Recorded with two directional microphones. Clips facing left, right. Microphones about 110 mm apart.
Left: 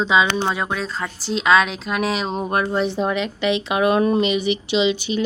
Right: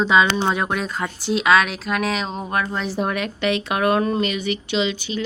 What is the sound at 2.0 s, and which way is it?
Speech, 5° left (ahead or behind).